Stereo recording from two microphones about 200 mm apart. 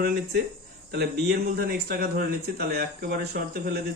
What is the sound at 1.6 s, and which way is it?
Speech, 50° right (ahead or behind).